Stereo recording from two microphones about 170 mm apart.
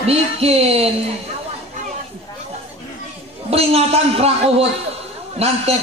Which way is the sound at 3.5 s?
35° right (ahead or behind).